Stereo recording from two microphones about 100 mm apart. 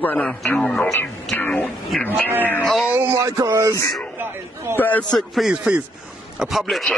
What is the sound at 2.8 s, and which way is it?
Speech, 20° right (ahead or behind).